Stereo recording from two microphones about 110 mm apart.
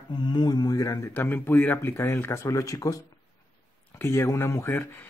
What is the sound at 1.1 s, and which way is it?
Speech, 15° left (ahead or behind).